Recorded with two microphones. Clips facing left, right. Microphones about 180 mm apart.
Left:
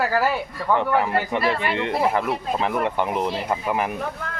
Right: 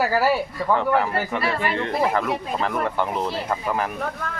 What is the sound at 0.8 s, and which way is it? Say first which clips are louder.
Speech: left 2 dB; 20° left (ahead or behind).